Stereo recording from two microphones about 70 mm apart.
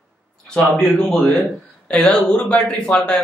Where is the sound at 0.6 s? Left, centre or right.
Centre.